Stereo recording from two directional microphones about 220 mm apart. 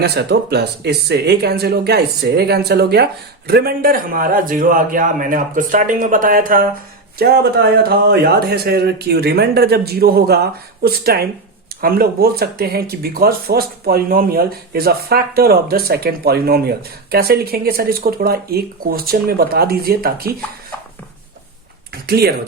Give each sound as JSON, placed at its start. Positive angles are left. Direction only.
{"t": 0.0, "sound": "speech", "side_deg": -50}
{"t": 22.0, "sound": "speech", "side_deg": -45}